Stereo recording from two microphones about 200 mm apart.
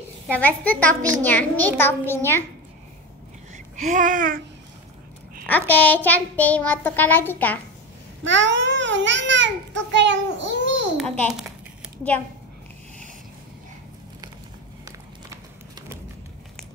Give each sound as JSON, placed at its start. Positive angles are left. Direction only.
{"t": 0.3, "sound": "a child's voice", "side_deg": 10}
{"t": 3.5, "sound": "babbling", "side_deg": -40}
{"t": 5.7, "sound": "a child's voice", "side_deg": 10}
{"t": 8.2, "sound": "a child's voice", "side_deg": -65}
{"t": 11.0, "sound": "a child's voice", "side_deg": 0}